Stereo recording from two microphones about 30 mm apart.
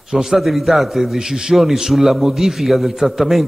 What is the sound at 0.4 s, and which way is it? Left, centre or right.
Speech, centre.